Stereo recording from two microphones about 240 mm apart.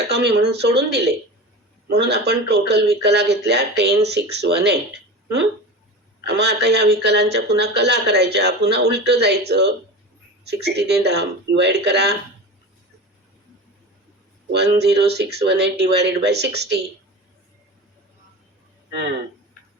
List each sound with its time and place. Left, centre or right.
0.1 s speech: right
6.2 s speech: right
14.5 s speech: right